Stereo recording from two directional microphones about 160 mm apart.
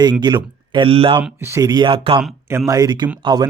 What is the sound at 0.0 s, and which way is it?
Speech, 25° right (ahead or behind).